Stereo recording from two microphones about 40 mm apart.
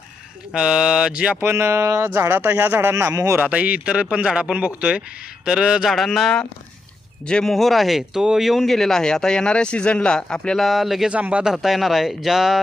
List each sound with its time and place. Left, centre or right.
0.5 s speech: centre
1.1 s speech: right
1.4 s speech: right
3.4 s speech: right
5.5 s speech: centre
5.8 s speech: centre
7.4 s speech: centre
8.2 s speech: centre
8.4 s speech: centre
10.6 s speech: centre
11.1 s speech: right
11.4 s speech: centre